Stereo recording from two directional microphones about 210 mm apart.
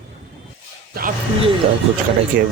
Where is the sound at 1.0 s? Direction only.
45° right (ahead or behind).